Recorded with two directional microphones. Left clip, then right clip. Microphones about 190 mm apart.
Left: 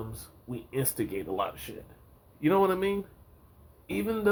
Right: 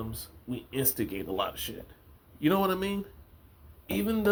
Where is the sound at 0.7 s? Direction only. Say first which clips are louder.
Left 1 dB; 30° right (ahead or behind).